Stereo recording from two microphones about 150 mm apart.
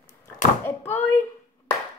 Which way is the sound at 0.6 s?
15° left (ahead or behind).